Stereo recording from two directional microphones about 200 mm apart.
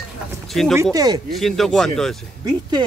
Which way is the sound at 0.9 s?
20° right (ahead or behind).